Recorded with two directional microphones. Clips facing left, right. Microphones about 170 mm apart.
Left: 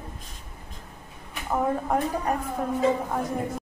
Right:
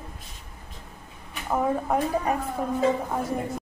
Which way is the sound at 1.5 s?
5° right (ahead or behind).